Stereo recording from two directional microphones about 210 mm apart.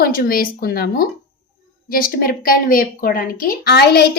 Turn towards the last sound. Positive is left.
turn(degrees=50)  # may be behind; listen again after turning